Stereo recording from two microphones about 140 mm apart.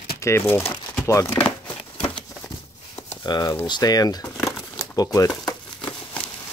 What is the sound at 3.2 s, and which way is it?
Speech, 30° left (ahead or behind).